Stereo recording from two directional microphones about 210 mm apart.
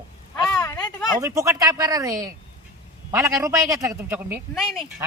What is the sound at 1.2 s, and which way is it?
A woman's voice, 15° right (ahead or behind).